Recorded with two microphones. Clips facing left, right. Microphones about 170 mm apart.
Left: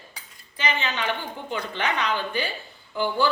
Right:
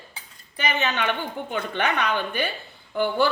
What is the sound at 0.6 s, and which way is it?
A woman's voice, 60° right (ahead or behind).